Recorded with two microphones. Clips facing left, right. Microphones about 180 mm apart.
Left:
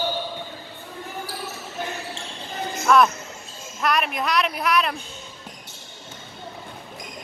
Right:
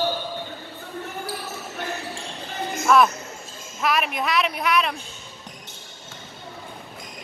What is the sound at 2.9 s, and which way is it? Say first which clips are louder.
Music: even; centre (ahead or behind).